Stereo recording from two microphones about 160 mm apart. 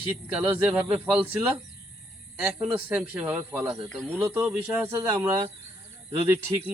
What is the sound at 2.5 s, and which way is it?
Speech, 10° right (ahead or behind).